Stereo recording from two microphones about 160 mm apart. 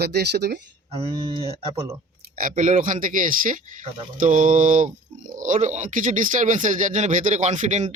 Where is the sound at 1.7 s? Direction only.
20° right (ahead or behind).